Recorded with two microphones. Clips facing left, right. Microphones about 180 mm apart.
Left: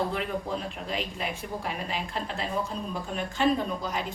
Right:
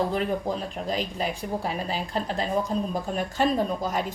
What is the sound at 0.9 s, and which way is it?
A woman's voice, 35° right (ahead or behind).